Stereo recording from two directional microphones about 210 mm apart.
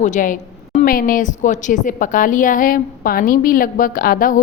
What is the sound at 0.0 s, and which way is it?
A woman's voice, 35° left (ahead or behind).